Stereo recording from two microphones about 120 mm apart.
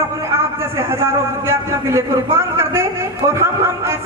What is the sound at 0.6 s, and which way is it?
A man's voice, 20° right (ahead or behind).